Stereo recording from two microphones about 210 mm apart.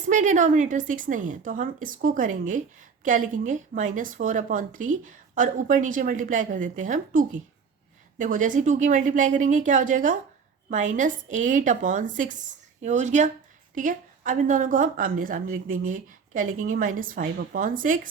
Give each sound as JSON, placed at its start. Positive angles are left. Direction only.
{"t": 0.1, "sound": "a woman's voice", "side_deg": -35}